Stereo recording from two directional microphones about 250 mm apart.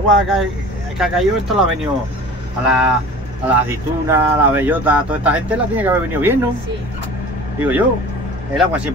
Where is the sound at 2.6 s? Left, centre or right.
Centre.